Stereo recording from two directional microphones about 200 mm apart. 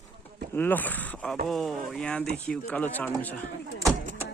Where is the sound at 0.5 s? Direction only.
10° left (ahead or behind).